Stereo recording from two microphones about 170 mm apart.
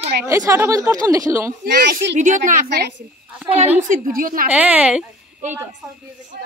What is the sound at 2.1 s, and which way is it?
Speech, 50° right (ahead or behind).